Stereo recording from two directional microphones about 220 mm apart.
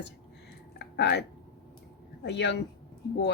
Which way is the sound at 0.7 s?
50° left (ahead or behind).